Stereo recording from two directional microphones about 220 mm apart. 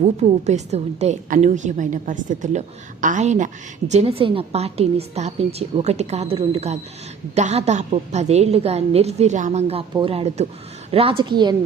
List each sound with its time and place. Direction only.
0.0 s a woman's voice: 30° right (ahead or behind)